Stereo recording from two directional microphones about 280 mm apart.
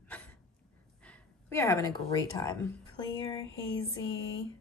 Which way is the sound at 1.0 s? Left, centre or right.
Centre.